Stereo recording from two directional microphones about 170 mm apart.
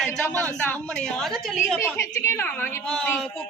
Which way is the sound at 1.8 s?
15° left (ahead or behind).